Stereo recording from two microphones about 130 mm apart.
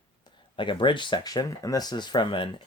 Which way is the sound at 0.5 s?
40° left (ahead or behind).